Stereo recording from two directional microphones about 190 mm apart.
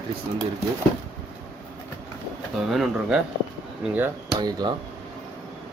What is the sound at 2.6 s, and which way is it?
Speech, centre (ahead or behind).